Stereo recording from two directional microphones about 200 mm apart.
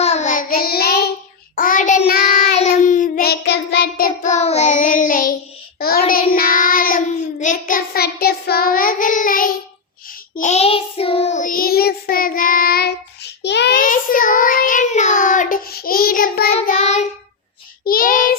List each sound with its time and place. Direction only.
0.0 s child singing: 35° left (ahead or behind)
16.5 s child singing: 35° left (ahead or behind)
17.8 s child singing: 45° left (ahead or behind)